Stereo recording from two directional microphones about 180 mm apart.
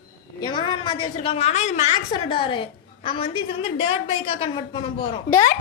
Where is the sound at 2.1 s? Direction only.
25° left (ahead or behind).